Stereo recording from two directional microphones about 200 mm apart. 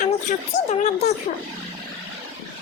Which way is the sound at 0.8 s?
35° left (ahead or behind).